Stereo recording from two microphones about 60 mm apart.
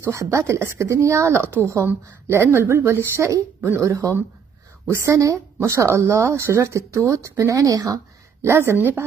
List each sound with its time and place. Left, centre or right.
0.1 s speech: right
2.2 s speech: right
3.9 s speech: right
8.4 s speech: right